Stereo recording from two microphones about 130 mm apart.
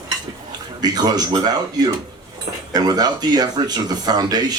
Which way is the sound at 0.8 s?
30° right (ahead or behind).